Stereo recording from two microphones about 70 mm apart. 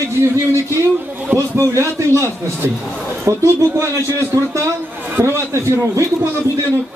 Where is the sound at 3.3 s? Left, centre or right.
Right.